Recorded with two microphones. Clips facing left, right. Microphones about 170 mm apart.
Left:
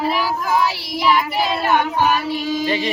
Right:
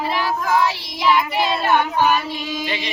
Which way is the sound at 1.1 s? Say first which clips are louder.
Even; 10° left (ahead or behind).